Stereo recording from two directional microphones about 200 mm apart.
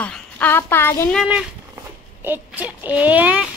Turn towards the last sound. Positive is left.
turn(degrees=-10)  # may be behind; listen again after turning